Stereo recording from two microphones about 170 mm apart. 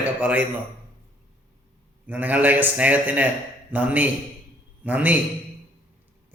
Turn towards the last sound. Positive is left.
turn(degrees=-10)  # may be behind; listen again after turning